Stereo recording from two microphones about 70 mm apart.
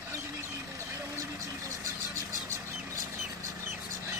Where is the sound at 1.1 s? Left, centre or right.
Right.